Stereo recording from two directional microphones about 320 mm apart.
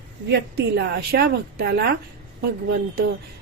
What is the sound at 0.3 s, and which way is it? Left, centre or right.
A woman's voice, right.